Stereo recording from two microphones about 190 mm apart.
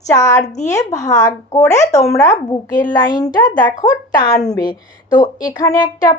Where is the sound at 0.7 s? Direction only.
15° left (ahead or behind).